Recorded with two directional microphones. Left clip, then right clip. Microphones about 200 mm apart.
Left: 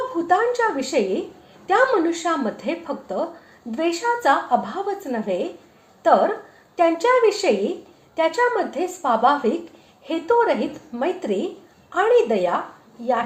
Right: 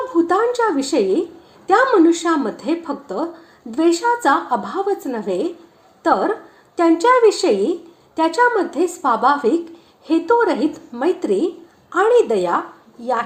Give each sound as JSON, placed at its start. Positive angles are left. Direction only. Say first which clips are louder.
{"t": 0.3, "sound": "a woman's voice", "louder": "left 2 dB", "side_deg": -25}